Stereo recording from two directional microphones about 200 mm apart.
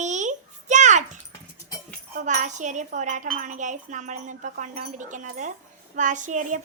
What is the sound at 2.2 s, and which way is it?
Speech, 35° right (ahead or behind).